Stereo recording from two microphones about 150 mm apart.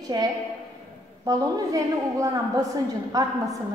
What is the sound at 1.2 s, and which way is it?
A woman's voice, 25° right (ahead or behind).